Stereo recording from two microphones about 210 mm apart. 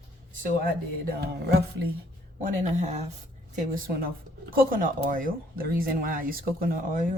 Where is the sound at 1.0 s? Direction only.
50° right (ahead or behind).